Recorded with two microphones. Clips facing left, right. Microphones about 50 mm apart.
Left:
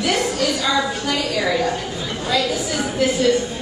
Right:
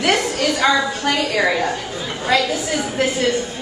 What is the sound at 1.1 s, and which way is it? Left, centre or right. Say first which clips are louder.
Speech: right 2 dB; right.